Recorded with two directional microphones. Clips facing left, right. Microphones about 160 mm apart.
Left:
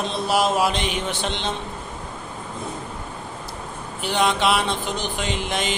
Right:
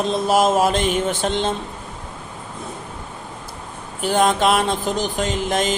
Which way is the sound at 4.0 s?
45° right (ahead or behind).